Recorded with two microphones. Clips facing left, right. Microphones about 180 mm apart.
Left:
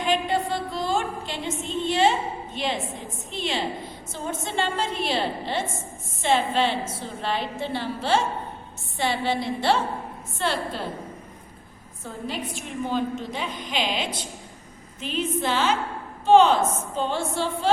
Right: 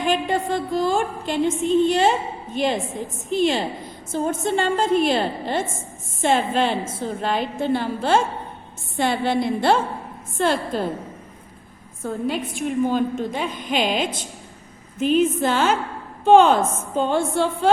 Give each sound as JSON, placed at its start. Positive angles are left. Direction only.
{"t": 0.0, "sound": "a woman's voice", "side_deg": -50}
{"t": 12.5, "sound": "a woman's voice", "side_deg": -50}